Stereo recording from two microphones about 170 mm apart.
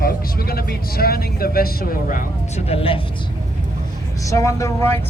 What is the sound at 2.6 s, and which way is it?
Speech, 35° left (ahead or behind).